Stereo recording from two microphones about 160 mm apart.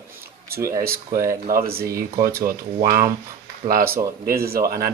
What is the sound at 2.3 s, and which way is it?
Speech, 70° right (ahead or behind).